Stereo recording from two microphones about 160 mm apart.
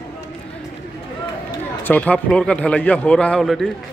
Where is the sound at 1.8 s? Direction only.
10° left (ahead or behind).